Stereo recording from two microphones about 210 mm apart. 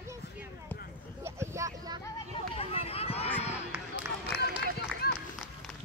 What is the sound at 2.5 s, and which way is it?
Run, 30° left (ahead or behind).